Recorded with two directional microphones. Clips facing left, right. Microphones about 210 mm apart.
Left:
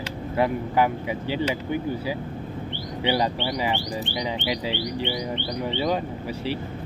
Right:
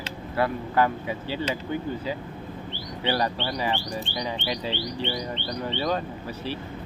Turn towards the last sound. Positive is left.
turn(degrees=15)  # may be behind; listen again after turning